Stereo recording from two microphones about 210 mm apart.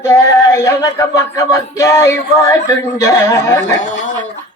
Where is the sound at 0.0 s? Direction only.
15° left (ahead or behind).